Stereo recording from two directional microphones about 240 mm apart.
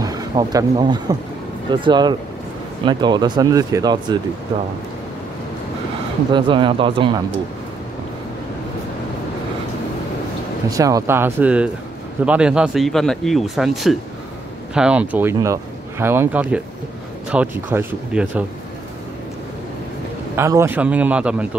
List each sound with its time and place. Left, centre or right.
0.0 s speech: centre
6.3 s speech: centre
10.7 s speech: centre
20.3 s speech: centre